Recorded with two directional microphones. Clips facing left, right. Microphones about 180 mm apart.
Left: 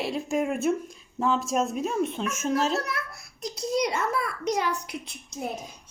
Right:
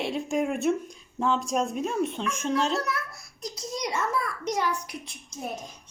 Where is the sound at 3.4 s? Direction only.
60° left (ahead or behind).